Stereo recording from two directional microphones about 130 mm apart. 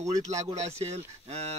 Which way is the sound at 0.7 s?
55° right (ahead or behind).